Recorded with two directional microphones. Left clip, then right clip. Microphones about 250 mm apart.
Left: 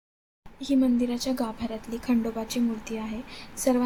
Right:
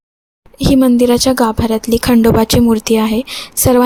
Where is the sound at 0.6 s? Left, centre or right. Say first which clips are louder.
Right 14 dB; right.